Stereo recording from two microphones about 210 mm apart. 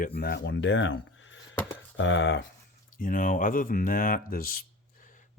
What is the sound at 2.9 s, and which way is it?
Speech, 40° left (ahead or behind).